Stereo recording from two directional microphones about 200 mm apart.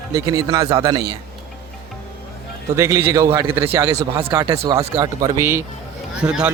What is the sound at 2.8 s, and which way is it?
Speech, 15° right (ahead or behind).